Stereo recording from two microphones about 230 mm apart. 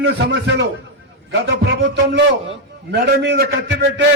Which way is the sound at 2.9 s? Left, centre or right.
Right.